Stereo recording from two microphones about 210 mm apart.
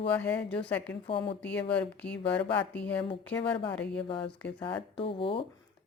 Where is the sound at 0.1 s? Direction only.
5° left (ahead or behind).